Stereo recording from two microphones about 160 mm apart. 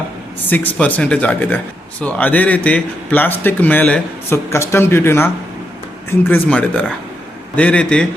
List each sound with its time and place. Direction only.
0.3 s speech: 10° left (ahead or behind)